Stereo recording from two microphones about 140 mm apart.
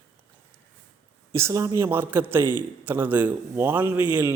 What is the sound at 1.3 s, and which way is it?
A man's voice, 20° right (ahead or behind).